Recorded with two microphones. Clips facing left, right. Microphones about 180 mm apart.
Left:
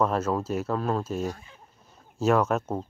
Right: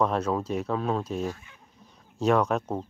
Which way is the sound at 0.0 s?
Centre (ahead or behind).